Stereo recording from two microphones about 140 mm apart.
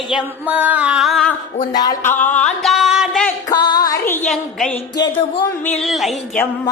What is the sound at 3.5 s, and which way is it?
Music, 30° left (ahead or behind).